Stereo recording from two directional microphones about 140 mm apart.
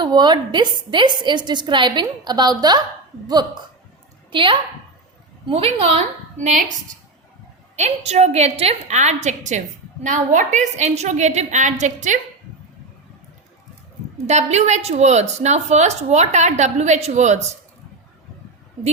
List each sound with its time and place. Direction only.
0.0 s a woman's voice: 30° right (ahead or behind)
6.3 s a woman's voice: 60° right (ahead or behind)
7.8 s a woman's voice: 50° right (ahead or behind)
14.3 s a woman's voice: 55° right (ahead or behind)